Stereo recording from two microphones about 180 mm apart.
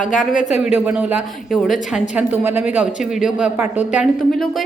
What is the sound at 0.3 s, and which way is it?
Speech, 40° left (ahead or behind).